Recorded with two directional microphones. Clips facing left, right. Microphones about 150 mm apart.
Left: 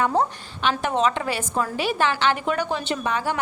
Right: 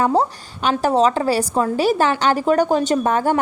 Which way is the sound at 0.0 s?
35° right (ahead or behind).